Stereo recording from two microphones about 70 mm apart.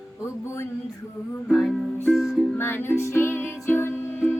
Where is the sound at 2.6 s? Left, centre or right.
Left.